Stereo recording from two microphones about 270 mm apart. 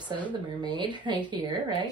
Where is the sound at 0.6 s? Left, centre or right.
Centre.